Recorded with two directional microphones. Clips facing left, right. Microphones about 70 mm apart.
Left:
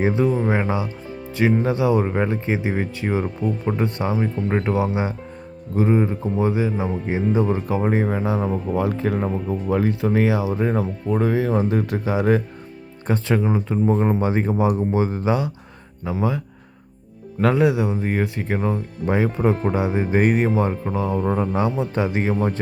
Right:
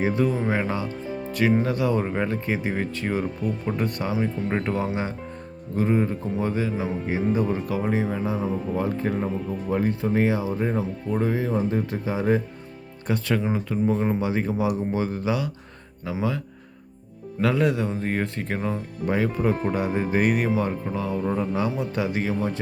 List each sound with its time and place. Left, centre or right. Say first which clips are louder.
0.0 s speech: left 4 dB; left
4.4 s speech: left 4 dB; centre
7.1 s speech: left 3 dB; left
8.0 s speech: left 4 dB; left
13.1 s a man's voice: left 4 dB; left
14.9 s speech: left 4 dB; left
17.6 s speech: left 4 dB; centre
19.0 s speech: left 3 dB; left
20.1 s speech: left 4 dB; left
21.2 s a man's voice: left 4 dB; left